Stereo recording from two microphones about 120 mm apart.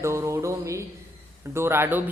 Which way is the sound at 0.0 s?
25° right (ahead or behind).